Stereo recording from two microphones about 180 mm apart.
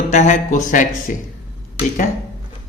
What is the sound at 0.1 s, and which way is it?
Speech, 40° left (ahead or behind).